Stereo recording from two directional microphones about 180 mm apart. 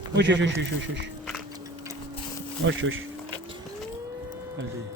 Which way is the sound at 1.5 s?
20° right (ahead or behind).